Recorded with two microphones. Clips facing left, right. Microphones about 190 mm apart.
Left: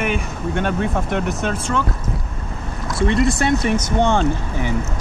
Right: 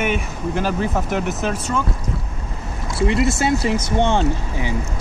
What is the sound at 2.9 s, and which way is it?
Speech, centre (ahead or behind).